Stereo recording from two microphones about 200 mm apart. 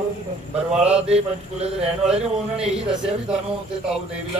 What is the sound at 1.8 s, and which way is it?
A man's voice, 5° right (ahead or behind).